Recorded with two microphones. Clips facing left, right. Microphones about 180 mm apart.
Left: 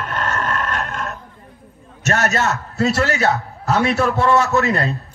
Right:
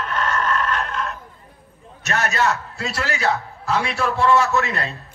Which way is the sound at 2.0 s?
40° left (ahead or behind).